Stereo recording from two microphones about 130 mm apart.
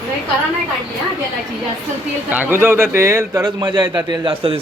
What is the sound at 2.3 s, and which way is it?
A man's voice, 15° right (ahead or behind).